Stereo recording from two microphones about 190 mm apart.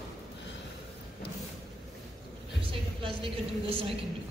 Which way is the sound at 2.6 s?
30° right (ahead or behind).